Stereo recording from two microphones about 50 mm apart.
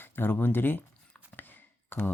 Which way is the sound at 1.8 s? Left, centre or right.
Left.